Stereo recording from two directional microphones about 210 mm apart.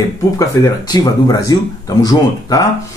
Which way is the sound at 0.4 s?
20° left (ahead or behind).